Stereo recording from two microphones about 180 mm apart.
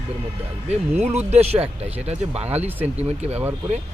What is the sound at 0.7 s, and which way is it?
Speech, 40° right (ahead or behind).